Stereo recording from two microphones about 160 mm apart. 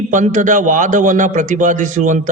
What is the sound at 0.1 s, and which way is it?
A man's voice, 55° right (ahead or behind).